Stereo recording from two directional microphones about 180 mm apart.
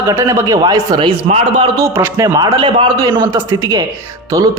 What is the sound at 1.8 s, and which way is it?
A man's voice, 15° right (ahead or behind).